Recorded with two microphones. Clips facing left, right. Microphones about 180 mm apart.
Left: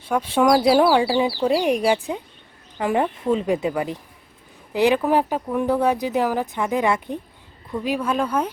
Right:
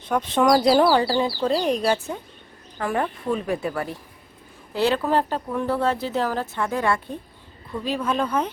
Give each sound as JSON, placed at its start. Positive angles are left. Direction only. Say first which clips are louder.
{"t": 0.0, "sound": "a woman's voice", "louder": "left 1 dB", "side_deg": 10}